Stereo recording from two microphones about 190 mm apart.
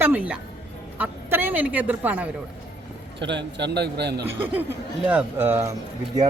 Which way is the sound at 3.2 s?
65° right (ahead or behind).